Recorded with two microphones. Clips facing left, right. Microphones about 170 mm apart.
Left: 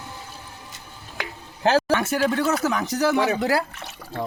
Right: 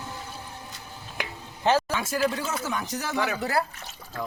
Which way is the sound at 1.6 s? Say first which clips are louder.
Left 4 dB; 70° left (ahead or behind).